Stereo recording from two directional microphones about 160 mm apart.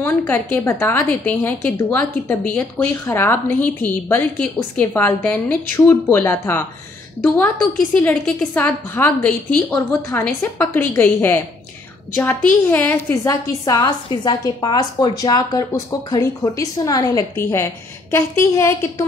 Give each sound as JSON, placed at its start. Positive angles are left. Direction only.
{"t": 0.0, "sound": "a woman's voice", "side_deg": 15}